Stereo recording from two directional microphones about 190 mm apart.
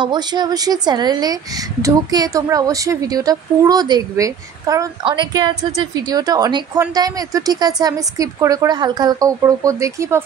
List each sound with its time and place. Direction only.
0.0 s a woman's voice: 20° right (ahead or behind)